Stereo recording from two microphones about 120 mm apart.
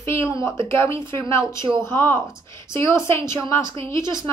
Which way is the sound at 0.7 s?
20° left (ahead or behind).